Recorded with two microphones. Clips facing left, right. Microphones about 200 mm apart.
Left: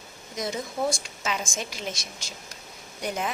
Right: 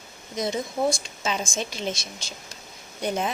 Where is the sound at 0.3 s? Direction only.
25° right (ahead or behind).